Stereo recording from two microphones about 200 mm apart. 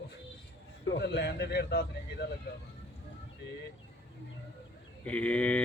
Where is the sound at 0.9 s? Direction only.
55° left (ahead or behind).